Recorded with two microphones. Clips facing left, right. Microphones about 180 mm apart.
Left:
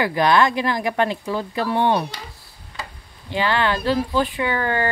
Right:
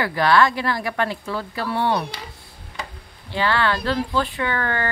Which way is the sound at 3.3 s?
15° left (ahead or behind).